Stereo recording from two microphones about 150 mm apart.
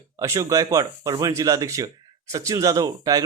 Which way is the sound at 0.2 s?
20° right (ahead or behind).